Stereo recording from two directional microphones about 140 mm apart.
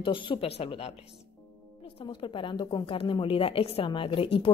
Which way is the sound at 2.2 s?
35° left (ahead or behind).